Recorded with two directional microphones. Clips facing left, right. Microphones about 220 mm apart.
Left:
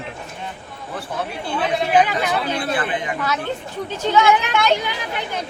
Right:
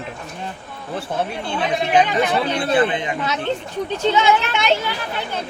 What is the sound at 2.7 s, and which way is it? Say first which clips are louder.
Speech: right 5 dB; 25° right (ahead or behind).